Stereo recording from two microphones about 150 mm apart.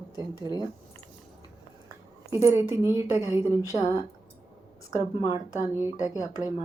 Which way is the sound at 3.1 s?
20° left (ahead or behind).